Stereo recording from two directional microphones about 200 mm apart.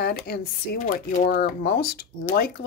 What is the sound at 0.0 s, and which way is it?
Speech, 50° left (ahead or behind).